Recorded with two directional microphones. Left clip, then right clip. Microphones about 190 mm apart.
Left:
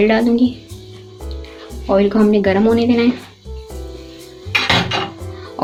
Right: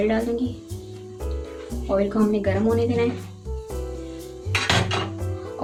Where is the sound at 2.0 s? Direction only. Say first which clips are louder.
Left 9 dB; 40° left (ahead or behind).